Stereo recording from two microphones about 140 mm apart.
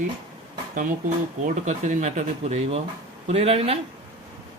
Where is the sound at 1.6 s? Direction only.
55° right (ahead or behind).